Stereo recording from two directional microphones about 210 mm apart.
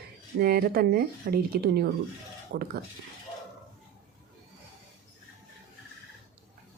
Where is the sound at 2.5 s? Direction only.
60° right (ahead or behind).